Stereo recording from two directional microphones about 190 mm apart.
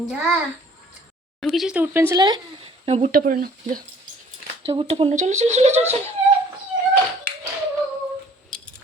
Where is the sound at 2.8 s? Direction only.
35° right (ahead or behind).